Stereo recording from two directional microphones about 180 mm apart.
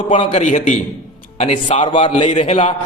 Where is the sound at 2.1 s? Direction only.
40° left (ahead or behind).